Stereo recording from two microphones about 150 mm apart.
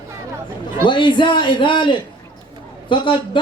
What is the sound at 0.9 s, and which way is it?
A man's voice, 30° left (ahead or behind).